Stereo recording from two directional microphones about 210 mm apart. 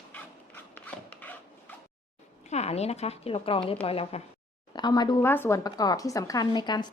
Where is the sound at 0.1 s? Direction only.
5° left (ahead or behind).